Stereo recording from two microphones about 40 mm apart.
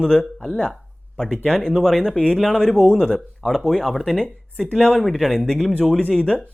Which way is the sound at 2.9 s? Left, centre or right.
Centre.